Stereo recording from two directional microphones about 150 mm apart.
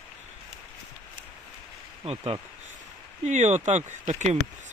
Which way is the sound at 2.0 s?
40° right (ahead or behind).